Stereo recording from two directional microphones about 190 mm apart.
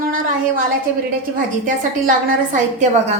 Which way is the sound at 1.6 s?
40° right (ahead or behind).